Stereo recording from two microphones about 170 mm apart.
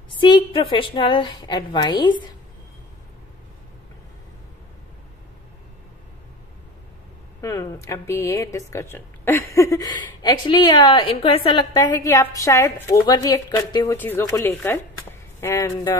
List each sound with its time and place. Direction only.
0.2 s a woman's voice: 25° left (ahead or behind)
7.4 s a woman's voice: 15° left (ahead or behind); by 11.6 s 35° left (ahead or behind)
11.7 s a woman's voice: 20° left (ahead or behind)